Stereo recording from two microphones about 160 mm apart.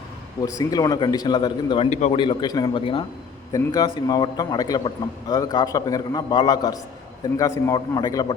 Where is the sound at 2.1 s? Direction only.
30° left (ahead or behind).